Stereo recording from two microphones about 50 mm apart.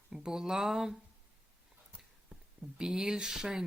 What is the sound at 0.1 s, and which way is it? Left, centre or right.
Speech, centre.